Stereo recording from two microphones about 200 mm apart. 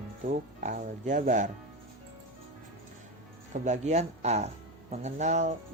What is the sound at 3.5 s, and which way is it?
Speech, 35° right (ahead or behind).